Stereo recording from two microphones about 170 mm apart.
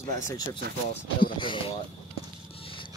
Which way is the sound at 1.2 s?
30° left (ahead or behind).